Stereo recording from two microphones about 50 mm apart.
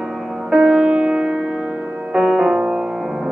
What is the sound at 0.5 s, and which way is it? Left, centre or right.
Music, centre.